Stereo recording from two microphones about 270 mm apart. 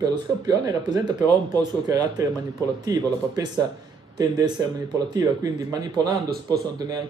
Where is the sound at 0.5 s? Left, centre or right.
Centre.